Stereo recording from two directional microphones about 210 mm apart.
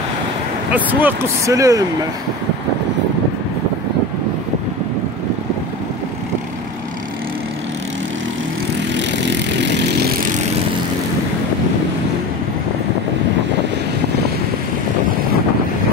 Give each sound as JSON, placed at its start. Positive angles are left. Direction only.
{"t": 0.7, "sound": "speech", "side_deg": -10}
{"t": 9.1, "sound": "vehicle", "side_deg": -55}